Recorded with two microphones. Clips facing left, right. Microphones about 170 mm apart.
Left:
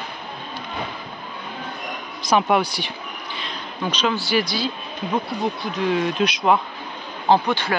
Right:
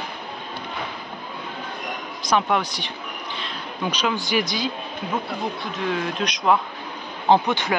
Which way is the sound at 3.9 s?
15° right (ahead or behind).